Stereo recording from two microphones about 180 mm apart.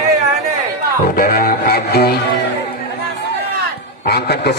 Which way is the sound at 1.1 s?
55° left (ahead or behind).